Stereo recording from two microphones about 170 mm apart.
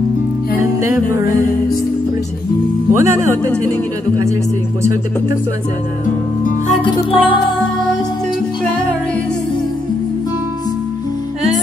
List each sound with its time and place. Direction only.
0.6 s music: 15° right (ahead or behind)
2.9 s speech: 15° right (ahead or behind)
6.8 s music: 30° left (ahead or behind)